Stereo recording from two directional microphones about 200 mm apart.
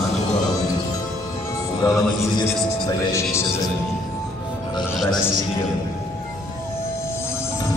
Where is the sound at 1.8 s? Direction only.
20° left (ahead or behind).